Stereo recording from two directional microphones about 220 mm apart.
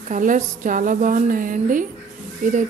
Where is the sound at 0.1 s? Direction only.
35° right (ahead or behind).